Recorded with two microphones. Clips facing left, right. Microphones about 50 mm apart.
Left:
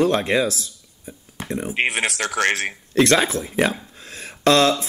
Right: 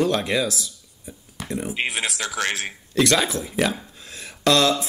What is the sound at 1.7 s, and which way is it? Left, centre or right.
Speech, left.